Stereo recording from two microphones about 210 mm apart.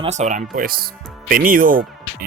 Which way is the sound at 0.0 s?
35° right (ahead or behind).